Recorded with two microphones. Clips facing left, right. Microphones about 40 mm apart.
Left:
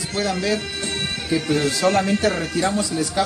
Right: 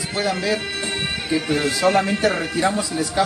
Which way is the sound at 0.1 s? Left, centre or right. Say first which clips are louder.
Even; centre.